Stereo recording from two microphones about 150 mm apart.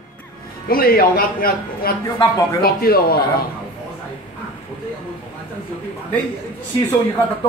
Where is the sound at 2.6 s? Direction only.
90° left.